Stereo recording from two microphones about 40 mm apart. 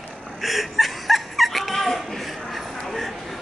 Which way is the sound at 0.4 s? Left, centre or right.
Centre.